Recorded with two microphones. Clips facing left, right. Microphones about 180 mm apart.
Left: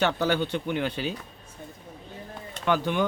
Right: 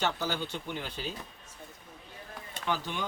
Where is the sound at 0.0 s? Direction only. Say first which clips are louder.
Left 8 dB; 65° left (ahead or behind).